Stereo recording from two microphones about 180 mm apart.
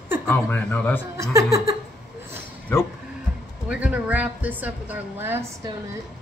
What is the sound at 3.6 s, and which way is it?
A woman's voice, 10° right (ahead or behind).